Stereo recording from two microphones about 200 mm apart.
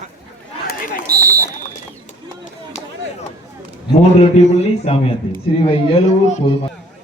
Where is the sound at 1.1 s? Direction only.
45° right (ahead or behind).